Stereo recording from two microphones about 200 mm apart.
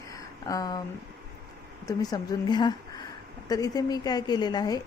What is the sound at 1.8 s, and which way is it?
Speech, 20° left (ahead or behind).